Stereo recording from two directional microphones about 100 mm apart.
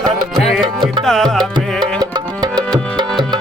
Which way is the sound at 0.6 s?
50° right (ahead or behind).